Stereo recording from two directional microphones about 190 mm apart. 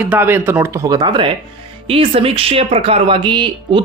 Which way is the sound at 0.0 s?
10° right (ahead or behind).